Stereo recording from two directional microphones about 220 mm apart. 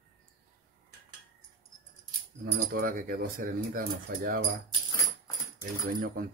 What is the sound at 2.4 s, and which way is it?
Speech, 40° right (ahead or behind).